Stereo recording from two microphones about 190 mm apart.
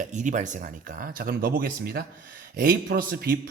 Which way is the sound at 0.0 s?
40° right (ahead or behind).